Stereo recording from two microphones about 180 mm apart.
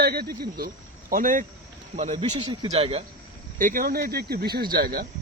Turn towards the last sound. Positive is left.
turn(degrees=-55)  # may be behind; listen again after turning